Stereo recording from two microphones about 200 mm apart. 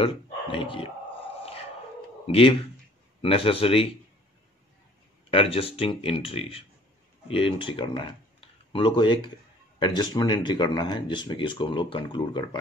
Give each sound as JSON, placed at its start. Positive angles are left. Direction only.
{"t": 0.0, "sound": "speech", "side_deg": 25}
{"t": 2.2, "sound": "speech", "side_deg": 30}
{"t": 5.3, "sound": "speech", "side_deg": 30}